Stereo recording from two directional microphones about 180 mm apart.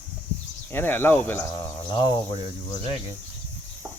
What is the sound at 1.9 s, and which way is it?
Speech, 25° left (ahead or behind).